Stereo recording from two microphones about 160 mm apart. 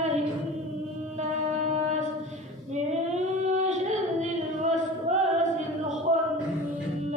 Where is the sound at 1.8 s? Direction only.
45° right (ahead or behind).